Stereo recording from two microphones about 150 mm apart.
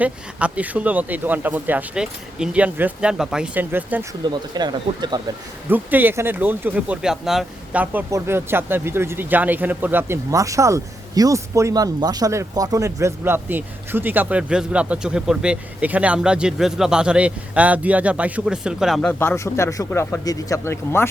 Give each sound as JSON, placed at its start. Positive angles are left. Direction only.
{"t": 0.0, "sound": "speech", "side_deg": -10}
{"t": 4.2, "sound": "speech", "side_deg": -30}
{"t": 5.7, "sound": "speech", "side_deg": -10}
{"t": 19.2, "sound": "speech", "side_deg": 15}